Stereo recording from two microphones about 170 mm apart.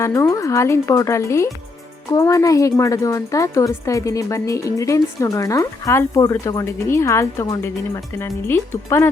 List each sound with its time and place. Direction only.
0.0 s a woman's voice: 15° left (ahead or behind)